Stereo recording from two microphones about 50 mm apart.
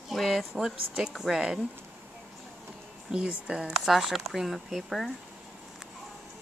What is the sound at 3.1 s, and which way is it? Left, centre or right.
Speech, centre.